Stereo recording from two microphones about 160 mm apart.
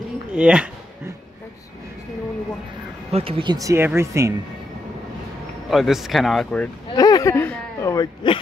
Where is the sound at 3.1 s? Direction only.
35° right (ahead or behind).